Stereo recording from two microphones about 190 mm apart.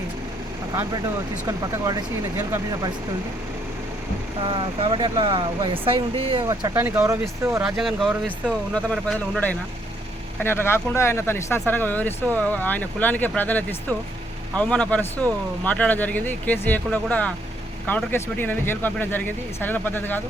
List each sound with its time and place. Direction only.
1.5 s speech: 20° right (ahead or behind)
4.4 s speech: 25° right (ahead or behind)
7.6 s speech: centre (ahead or behind)